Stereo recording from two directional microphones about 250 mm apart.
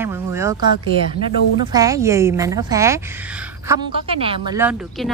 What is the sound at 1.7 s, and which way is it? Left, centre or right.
Speech, centre.